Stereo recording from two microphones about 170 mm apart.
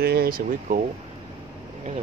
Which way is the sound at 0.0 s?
65° right (ahead or behind).